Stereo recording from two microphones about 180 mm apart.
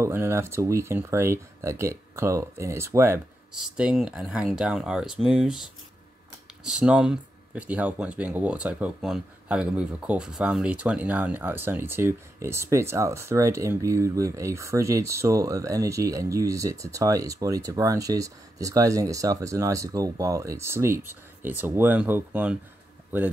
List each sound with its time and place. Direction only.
0.0 s speech: 15° right (ahead or behind)
3.5 s speech: 5° right (ahead or behind)
6.6 s speech: 5° right (ahead or behind)